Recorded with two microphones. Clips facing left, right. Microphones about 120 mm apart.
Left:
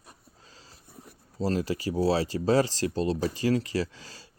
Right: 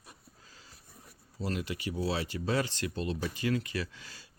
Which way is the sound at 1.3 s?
35° left (ahead or behind).